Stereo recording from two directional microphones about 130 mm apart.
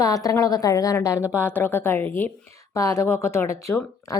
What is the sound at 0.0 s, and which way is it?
A woman's voice, 25° left (ahead or behind).